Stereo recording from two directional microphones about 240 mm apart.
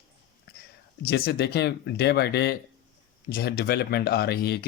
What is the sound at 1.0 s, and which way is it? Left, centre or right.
Speech, left.